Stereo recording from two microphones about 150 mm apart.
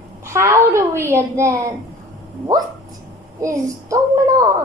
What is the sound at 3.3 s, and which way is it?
A woman's voice, 20° right (ahead or behind).